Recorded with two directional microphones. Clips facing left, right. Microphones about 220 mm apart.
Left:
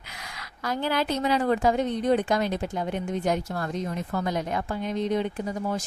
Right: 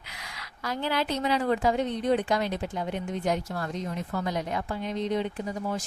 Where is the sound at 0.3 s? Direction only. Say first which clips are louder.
Left 3 dB; 45° left (ahead or behind).